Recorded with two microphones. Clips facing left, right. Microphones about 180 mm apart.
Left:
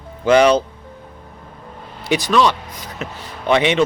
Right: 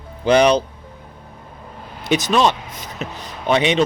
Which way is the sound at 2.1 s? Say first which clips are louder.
Left 1 dB; 20° right (ahead or behind).